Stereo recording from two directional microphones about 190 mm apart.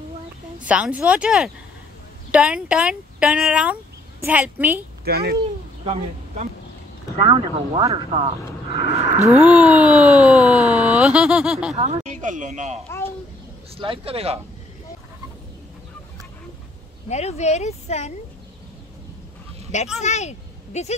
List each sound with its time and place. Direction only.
0.6 s speech: 5° right (ahead or behind)
5.0 s a child's voice: 55° right (ahead or behind)
7.2 s speech: 25° right (ahead or behind)
9.4 s speech: 5° right (ahead or behind)
10.6 s a sound: 35° right (ahead or behind)
11.0 s speech: 5° right (ahead or behind)
11.7 s speech: 35° right (ahead or behind)
13.7 s speech: 30° right (ahead or behind)
17.1 s speech: 35° left (ahead or behind)
20.0 s speech: 35° left (ahead or behind)